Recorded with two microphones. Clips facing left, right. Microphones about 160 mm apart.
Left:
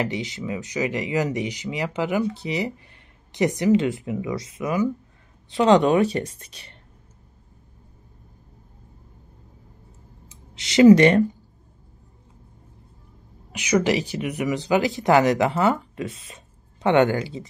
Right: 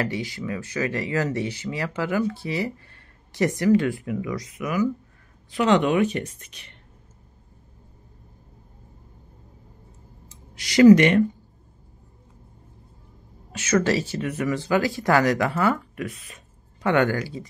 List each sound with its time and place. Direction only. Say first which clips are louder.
0.0 s speech: left 1 dB; 20° left (ahead or behind)
10.5 s speech: even; 25° left (ahead or behind)
13.5 s speech: left 1 dB; 15° left (ahead or behind)